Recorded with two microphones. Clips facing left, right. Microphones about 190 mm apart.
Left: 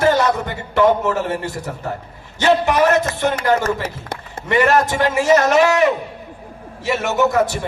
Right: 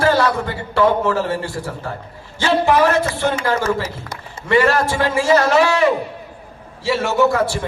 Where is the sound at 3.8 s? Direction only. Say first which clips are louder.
Left 2 dB; 55° left (ahead or behind).